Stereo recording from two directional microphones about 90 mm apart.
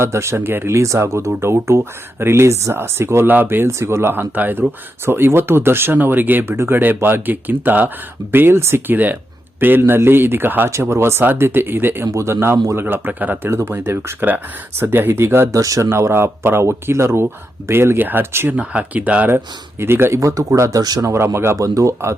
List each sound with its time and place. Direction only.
0.0 s speech: 30° right (ahead or behind)
19.8 s speech: 25° right (ahead or behind); by 21.1 s 45° right (ahead or behind)
21.1 s speech: 30° right (ahead or behind)